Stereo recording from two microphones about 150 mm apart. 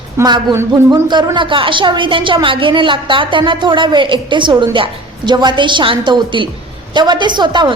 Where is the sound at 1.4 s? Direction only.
35° right (ahead or behind).